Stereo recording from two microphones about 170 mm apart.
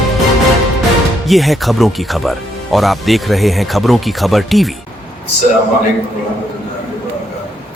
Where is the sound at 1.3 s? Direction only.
Centre (ahead or behind).